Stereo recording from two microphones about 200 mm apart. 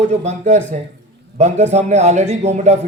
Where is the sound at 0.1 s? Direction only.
35° right (ahead or behind).